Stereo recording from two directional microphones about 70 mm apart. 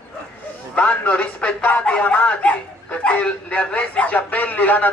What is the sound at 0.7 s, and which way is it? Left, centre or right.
A man's voice, centre.